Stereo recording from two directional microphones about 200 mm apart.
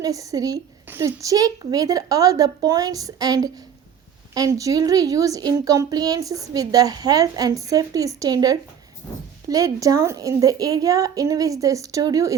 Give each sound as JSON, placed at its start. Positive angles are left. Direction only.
{"t": 0.0, "sound": "a woman's voice", "side_deg": -15}